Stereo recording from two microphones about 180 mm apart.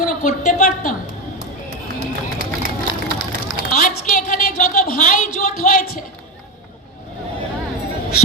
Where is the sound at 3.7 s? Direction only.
45° left (ahead or behind).